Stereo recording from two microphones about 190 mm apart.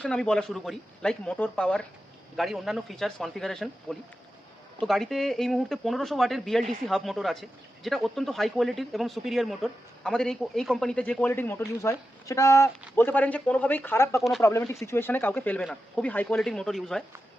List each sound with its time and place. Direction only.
0.0 s speech: 5° left (ahead or behind)
14.2 s speech: centre (ahead or behind)
14.7 s speech: 15° left (ahead or behind)